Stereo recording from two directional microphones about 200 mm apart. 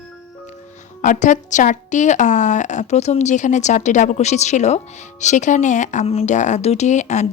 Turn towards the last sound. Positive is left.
turn(degrees=35)  # may be behind; listen again after turning